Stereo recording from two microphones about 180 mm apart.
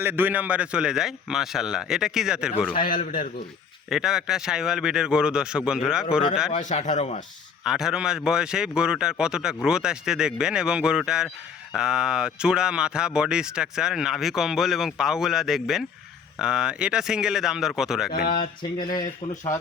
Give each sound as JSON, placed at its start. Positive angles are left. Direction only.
{"t": 0.0, "sound": "speech", "side_deg": -10}
{"t": 2.9, "sound": "a man's voice", "side_deg": 50}
{"t": 3.8, "sound": "speech", "side_deg": 0}
{"t": 6.5, "sound": "a man's voice", "side_deg": 45}
{"t": 7.6, "sound": "speech", "side_deg": 0}
{"t": 18.8, "sound": "speech", "side_deg": 20}